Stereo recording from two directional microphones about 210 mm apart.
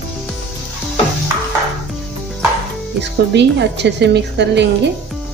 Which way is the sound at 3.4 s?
55° right (ahead or behind).